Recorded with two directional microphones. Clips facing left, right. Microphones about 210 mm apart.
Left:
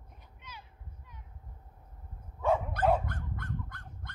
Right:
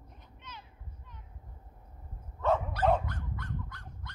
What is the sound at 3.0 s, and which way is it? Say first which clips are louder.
Dog: left 1 dB; 55° left (ahead or behind).